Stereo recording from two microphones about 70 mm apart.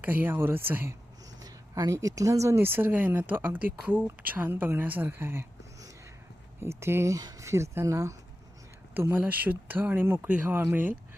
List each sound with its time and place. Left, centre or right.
0.0 s speech: right
1.4 s a sound: right
1.9 s speech: right
2.6 s a woman's voice: right
6.6 s speech: right
9.0 s a woman's voice: right
10.2 s a woman's voice: centre